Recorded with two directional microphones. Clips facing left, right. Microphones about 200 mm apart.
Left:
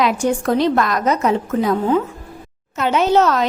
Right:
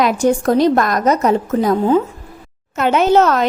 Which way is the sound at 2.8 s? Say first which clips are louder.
Right 3 dB; 55° right (ahead or behind).